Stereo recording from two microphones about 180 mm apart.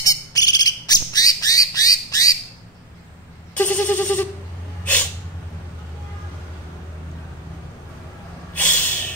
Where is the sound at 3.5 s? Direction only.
10° left (ahead or behind).